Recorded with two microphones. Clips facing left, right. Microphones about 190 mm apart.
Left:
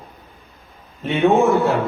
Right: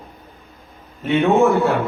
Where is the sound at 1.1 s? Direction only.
Centre (ahead or behind).